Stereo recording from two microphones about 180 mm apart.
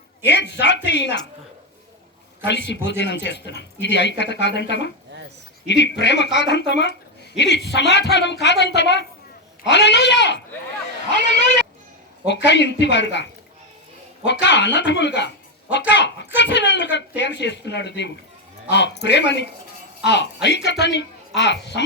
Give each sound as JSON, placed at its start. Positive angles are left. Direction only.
{"t": 0.3, "sound": "speech", "side_deg": 75}
{"t": 2.5, "sound": "speech", "side_deg": 75}
{"t": 12.2, "sound": "speech", "side_deg": 75}
{"t": 14.4, "sound": "speech", "side_deg": 75}